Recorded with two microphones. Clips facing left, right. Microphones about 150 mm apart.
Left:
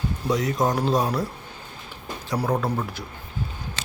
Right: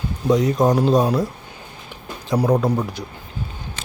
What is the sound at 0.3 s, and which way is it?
Speech, 20° right (ahead or behind).